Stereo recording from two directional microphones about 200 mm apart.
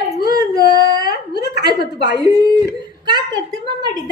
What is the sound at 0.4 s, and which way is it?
Child singing, 20° right (ahead or behind).